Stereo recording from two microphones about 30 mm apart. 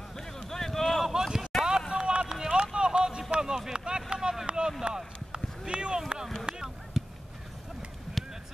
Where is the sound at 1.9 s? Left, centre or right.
Right.